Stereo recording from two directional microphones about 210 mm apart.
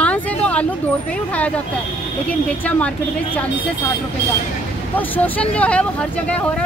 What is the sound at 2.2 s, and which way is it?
Speech, 5° left (ahead or behind).